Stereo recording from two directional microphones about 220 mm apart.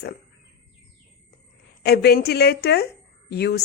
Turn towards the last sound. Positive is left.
turn(degrees=50)  # may be behind; listen again after turning